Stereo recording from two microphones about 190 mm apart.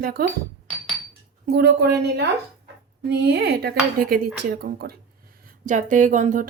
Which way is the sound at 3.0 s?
60° right (ahead or behind).